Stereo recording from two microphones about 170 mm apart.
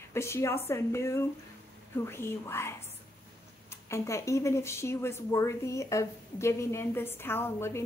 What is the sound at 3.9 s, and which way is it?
A woman's voice, 15° left (ahead or behind).